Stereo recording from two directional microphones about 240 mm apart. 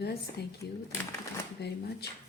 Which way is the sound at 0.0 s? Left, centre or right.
Left.